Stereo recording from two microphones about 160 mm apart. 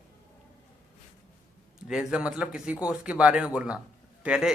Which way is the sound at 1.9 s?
5° right (ahead or behind).